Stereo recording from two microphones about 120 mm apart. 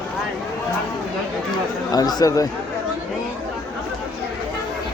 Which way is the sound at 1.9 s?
30° left (ahead or behind).